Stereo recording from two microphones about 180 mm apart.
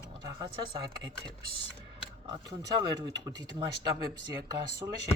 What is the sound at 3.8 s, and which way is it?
Speech, 25° right (ahead or behind).